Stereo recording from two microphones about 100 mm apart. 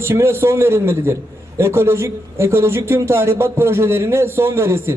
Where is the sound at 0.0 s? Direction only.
25° right (ahead or behind).